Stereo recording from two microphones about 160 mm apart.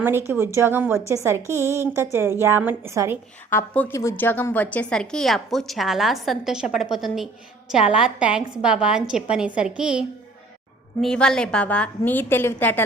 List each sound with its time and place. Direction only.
0.0 s speech: 15° right (ahead or behind)
3.5 s a woman's voice: 15° left (ahead or behind)